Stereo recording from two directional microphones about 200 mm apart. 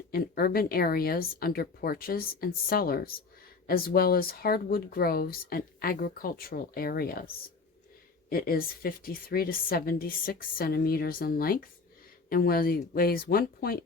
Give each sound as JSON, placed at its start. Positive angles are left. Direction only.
{"t": 0.1, "sound": "speech", "side_deg": 50}
{"t": 8.3, "sound": "speech", "side_deg": 45}